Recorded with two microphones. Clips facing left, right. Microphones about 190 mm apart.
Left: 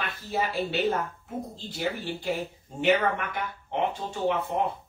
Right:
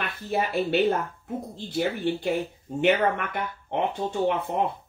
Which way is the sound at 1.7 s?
60° right (ahead or behind).